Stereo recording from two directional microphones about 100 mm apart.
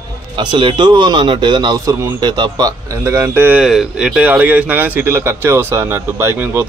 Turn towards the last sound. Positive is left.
turn(degrees=-25)  # may be behind; listen again after turning